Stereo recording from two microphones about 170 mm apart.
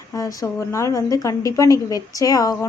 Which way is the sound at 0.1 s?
20° left (ahead or behind).